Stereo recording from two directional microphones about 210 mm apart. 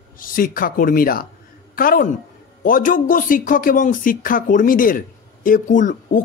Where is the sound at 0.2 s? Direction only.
40° left (ahead or behind).